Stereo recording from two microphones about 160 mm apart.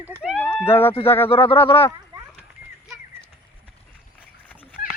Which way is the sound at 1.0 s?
15° left (ahead or behind).